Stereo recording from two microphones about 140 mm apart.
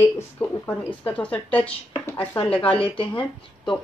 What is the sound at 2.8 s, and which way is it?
Speech, 40° left (ahead or behind).